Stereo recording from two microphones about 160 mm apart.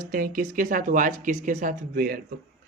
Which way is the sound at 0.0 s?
65° right (ahead or behind).